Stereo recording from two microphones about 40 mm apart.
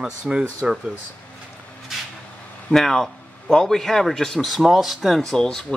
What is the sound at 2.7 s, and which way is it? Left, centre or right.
Speech, centre.